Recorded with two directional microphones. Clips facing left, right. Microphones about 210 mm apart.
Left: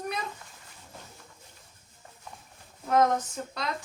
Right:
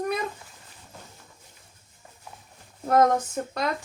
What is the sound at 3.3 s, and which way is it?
Speech, 50° right (ahead or behind).